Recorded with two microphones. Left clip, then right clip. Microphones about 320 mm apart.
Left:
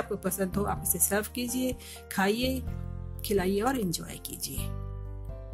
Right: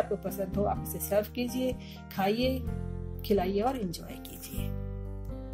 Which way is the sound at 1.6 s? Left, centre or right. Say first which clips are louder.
Even; centre.